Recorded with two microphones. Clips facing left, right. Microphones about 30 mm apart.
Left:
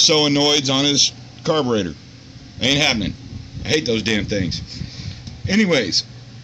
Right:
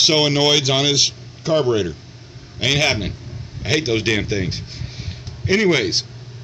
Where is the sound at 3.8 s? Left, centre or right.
Left.